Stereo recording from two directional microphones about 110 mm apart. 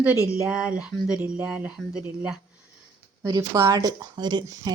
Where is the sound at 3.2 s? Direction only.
35° right (ahead or behind).